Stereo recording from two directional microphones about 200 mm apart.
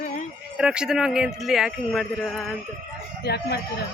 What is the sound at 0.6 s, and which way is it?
Speech, 5° right (ahead or behind).